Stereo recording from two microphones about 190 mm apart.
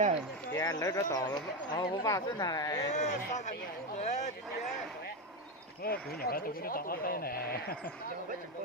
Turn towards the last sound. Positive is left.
turn(degrees=55)  # may be behind; listen again after turning